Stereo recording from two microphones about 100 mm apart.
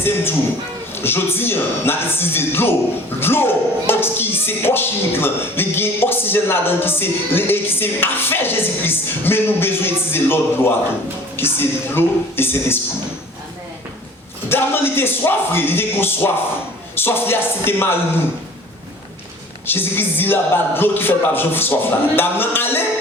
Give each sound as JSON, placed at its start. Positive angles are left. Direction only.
{"t": 0.9, "sound": "speech", "side_deg": 25}
{"t": 14.5, "sound": "speech", "side_deg": 25}
{"t": 19.6, "sound": "speech", "side_deg": 20}